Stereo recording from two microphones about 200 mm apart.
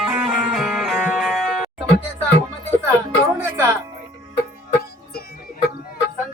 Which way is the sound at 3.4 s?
15° right (ahead or behind).